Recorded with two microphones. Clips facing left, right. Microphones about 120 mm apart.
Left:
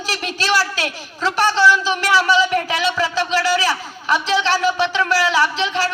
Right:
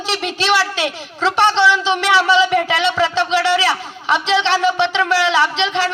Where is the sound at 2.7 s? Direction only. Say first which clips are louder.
Right 3 dB; 25° right (ahead or behind).